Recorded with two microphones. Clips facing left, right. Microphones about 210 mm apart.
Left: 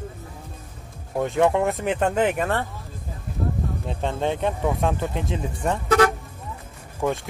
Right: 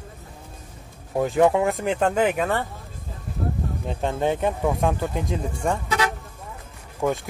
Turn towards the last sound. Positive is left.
turn(degrees=0)  # may be behind; listen again after turning